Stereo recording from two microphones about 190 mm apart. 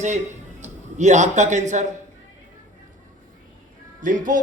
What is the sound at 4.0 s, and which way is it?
Speech, 45° right (ahead or behind).